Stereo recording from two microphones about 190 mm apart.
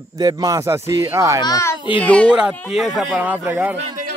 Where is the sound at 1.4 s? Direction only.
20° left (ahead or behind).